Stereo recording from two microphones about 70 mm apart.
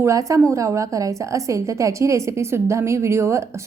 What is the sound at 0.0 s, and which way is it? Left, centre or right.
A woman's voice, right.